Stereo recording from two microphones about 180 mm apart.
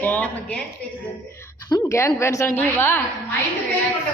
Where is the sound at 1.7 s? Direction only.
15° left (ahead or behind).